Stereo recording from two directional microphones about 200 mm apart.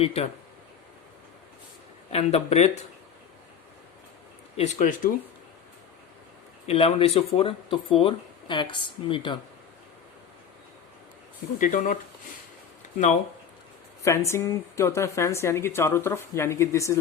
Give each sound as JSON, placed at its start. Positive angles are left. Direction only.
{"t": 0.0, "sound": "speech", "side_deg": 30}
{"t": 2.1, "sound": "speech", "side_deg": 30}
{"t": 4.5, "sound": "speech", "side_deg": 35}
{"t": 6.7, "sound": "speech", "side_deg": 30}
{"t": 11.6, "sound": "speech", "side_deg": 40}
{"t": 14.0, "sound": "speech", "side_deg": 15}